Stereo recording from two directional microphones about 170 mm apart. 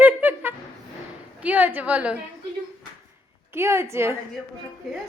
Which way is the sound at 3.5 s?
15° right (ahead or behind).